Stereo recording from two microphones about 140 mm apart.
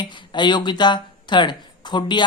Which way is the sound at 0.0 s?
35° left (ahead or behind).